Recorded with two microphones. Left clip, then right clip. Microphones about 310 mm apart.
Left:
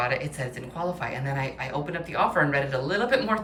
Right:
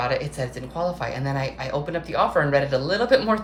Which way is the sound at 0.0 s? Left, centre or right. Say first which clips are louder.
Right 3 dB; centre.